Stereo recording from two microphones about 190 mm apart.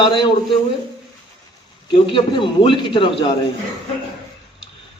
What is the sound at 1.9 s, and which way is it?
A man's voice, 25° left (ahead or behind).